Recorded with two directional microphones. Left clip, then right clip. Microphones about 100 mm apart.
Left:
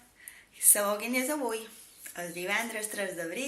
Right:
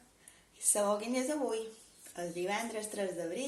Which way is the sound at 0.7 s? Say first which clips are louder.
Left 3 dB; 20° right (ahead or behind).